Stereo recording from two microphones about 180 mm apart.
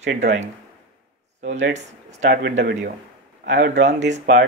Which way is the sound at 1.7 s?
40° right (ahead or behind).